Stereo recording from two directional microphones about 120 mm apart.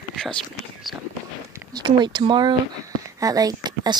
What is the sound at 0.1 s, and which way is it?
Whispering, 5° left (ahead or behind).